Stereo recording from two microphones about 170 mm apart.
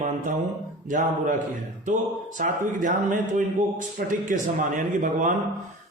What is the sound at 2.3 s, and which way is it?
Speech, 50° right (ahead or behind).